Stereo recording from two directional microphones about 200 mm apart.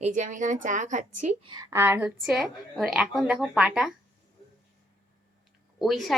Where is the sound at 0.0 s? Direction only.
40° right (ahead or behind).